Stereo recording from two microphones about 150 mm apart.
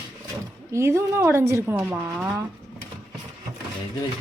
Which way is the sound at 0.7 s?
20° right (ahead or behind).